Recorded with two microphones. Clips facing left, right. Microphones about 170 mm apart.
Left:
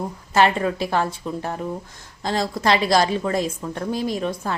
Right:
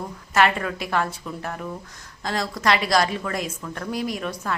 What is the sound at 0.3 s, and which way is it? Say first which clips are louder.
A woman's voice: left 3 dB; 30° left (ahead or behind).